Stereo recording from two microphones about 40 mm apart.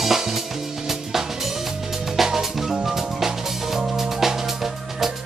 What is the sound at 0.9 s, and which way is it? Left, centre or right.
Drum kit, centre.